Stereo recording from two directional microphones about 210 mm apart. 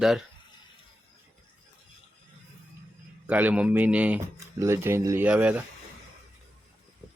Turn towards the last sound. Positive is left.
turn(degrees=-5)  # may be behind; listen again after turning